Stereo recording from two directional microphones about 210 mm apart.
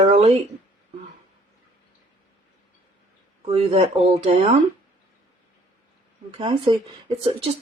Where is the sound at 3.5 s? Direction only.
25° right (ahead or behind).